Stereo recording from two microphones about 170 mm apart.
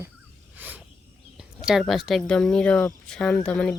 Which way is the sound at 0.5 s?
10° right (ahead or behind).